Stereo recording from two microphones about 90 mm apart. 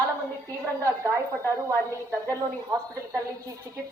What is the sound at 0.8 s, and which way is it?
Speech, 35° right (ahead or behind).